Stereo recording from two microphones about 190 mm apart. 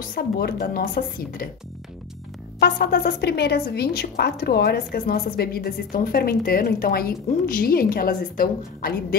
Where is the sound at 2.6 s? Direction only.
60° left (ahead or behind).